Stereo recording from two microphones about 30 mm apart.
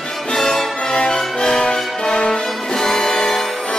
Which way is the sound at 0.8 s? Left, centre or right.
Left.